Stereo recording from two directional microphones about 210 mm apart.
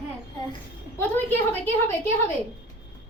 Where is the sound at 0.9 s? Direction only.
10° left (ahead or behind).